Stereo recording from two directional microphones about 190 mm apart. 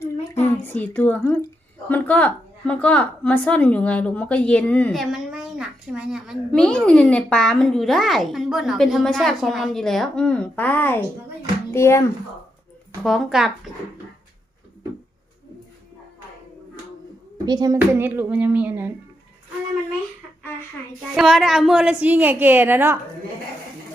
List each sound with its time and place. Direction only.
0.7 s a woman's voice: 10° left (ahead or behind)
13.0 s a woman's voice: centre (ahead or behind)
17.4 s a child's voice: 20° right (ahead or behind)
17.7 s a woman's voice: 10° right (ahead or behind)
21.2 s a woman's voice: centre (ahead or behind)